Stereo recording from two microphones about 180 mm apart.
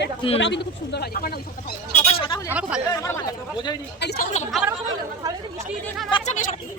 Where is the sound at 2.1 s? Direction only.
25° left (ahead or behind).